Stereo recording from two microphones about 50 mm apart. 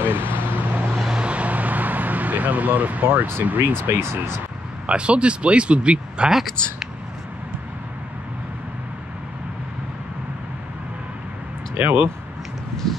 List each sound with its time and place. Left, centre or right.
0.0 s vehicle: right
1.1 s vehicle: right
3.4 s speech: right
3.7 s speech: right
4.8 s speech: right
11.8 s speech: right